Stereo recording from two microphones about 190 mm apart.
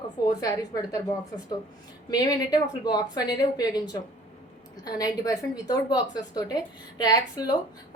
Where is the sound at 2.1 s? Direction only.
20° left (ahead or behind).